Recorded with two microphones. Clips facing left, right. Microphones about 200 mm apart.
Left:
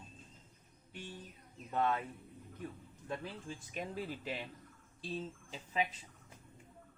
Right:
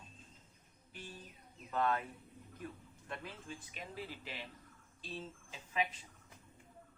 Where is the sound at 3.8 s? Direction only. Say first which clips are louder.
Left 8 dB; 45° left (ahead or behind).